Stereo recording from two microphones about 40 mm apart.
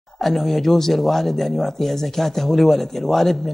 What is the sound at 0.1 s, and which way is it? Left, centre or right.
A woman's voice, centre.